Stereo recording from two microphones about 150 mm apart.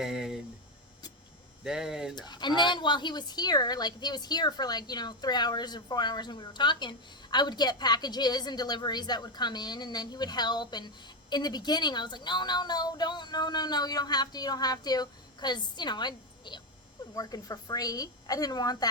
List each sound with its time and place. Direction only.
0.0 s speech: 5° right (ahead or behind)
1.6 s speech: 5° right (ahead or behind)
2.1 s a woman's voice: 30° left (ahead or behind)